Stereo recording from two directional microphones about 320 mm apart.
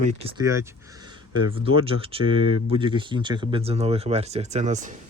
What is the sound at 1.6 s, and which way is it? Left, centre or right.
Speech, centre.